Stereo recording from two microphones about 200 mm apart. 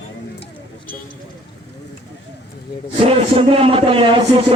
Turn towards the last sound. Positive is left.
turn(degrees=-25)  # may be behind; listen again after turning